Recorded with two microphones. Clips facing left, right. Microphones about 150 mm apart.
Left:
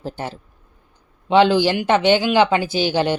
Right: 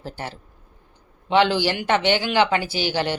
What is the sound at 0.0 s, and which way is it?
Speech, 20° left (ahead or behind).